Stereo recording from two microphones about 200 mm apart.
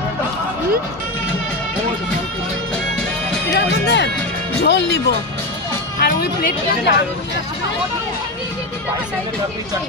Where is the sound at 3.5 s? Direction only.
60° left (ahead or behind).